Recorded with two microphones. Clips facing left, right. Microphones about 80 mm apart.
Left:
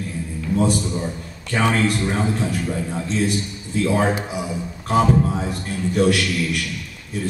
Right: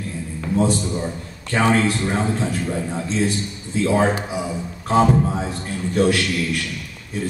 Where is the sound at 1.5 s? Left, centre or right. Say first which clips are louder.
Right 1 dB; right.